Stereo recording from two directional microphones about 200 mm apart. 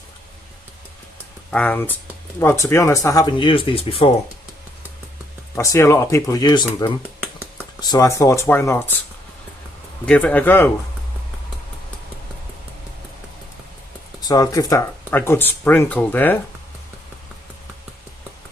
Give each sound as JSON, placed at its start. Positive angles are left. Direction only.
{"t": 1.5, "sound": "speech", "side_deg": 5}
{"t": 5.5, "sound": "speech", "side_deg": 15}
{"t": 7.2, "sound": "a sound", "side_deg": -5}
{"t": 7.8, "sound": "speech", "side_deg": 20}
{"t": 10.1, "sound": "speech", "side_deg": 10}
{"t": 14.2, "sound": "speech", "side_deg": 20}